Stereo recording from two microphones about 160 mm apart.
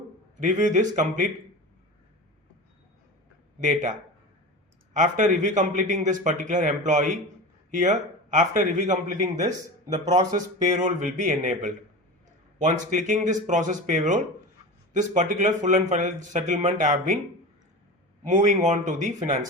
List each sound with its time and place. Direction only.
0.3 s a man's voice: 50° right (ahead or behind)
3.6 s a man's voice: 50° right (ahead or behind)
4.9 s a man's voice: 50° right (ahead or behind)
18.2 s a man's voice: 50° right (ahead or behind)